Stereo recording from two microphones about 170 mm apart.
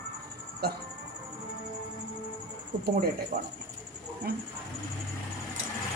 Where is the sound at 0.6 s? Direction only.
70° right (ahead or behind).